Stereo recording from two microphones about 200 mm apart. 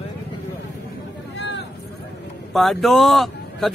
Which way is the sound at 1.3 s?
60° left (ahead or behind).